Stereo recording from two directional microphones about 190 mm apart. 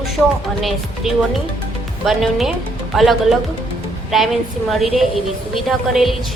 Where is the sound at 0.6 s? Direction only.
Centre (ahead or behind).